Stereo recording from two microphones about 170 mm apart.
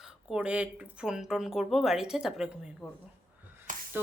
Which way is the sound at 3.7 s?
50° right (ahead or behind).